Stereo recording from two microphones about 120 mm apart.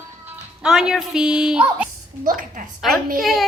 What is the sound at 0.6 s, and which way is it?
A child's voice, 5° right (ahead or behind).